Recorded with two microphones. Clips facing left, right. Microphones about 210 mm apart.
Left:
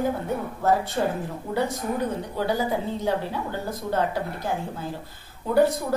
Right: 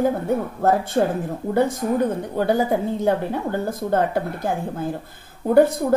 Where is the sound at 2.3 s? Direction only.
50° right (ahead or behind).